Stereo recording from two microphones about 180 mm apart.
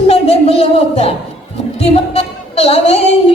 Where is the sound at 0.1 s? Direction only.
35° left (ahead or behind).